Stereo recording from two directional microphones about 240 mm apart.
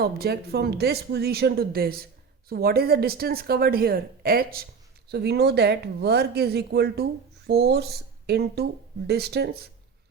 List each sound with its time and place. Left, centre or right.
0.0 s speech: right